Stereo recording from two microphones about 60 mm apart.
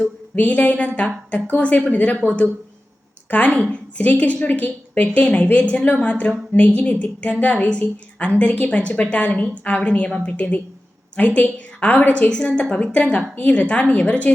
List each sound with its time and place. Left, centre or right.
0.3 s a woman's voice: left